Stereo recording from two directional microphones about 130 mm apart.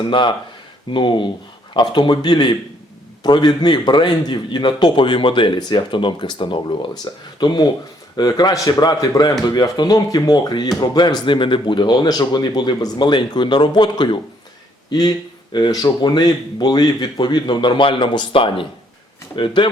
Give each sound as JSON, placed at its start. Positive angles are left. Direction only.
{"t": 0.1, "sound": "a man's voice", "side_deg": 40}
{"t": 15.5, "sound": "speech", "side_deg": 30}